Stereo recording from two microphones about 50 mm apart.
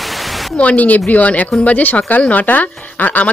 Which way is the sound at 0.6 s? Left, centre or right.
Left.